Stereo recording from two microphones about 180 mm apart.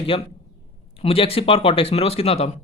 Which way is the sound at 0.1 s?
30° left (ahead or behind).